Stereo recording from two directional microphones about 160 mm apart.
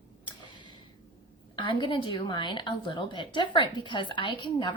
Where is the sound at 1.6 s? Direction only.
30° left (ahead or behind).